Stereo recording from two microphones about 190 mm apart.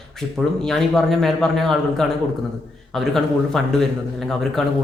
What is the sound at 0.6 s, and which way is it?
Speech, centre (ahead or behind).